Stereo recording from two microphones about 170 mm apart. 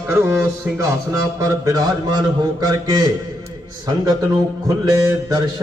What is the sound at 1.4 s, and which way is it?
Mantra, 20° right (ahead or behind).